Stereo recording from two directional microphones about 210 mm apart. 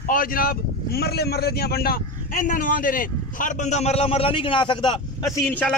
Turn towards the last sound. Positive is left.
turn(degrees=10)  # may be behind; listen again after turning